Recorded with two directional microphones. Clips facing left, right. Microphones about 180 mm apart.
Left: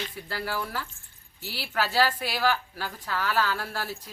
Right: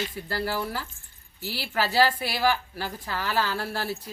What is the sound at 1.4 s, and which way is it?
Speech, 5° right (ahead or behind).